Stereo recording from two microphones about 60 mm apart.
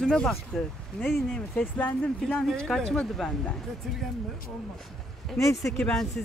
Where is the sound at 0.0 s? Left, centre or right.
Centre.